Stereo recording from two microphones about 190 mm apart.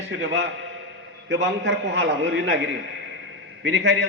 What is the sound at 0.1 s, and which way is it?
Speech, 70° right (ahead or behind).